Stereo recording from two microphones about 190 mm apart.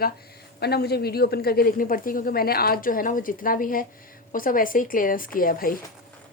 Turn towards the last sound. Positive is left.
turn(degrees=50)  # may be behind; listen again after turning